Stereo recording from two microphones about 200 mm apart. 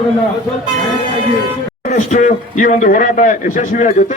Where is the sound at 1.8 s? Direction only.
40° left (ahead or behind).